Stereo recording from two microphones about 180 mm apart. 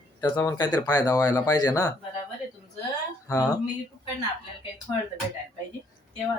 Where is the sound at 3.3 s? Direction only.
20° left (ahead or behind).